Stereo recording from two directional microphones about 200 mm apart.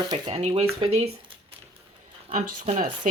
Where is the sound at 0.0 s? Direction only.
25° right (ahead or behind).